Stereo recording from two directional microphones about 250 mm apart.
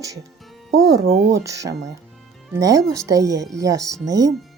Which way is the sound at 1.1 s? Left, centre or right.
Right.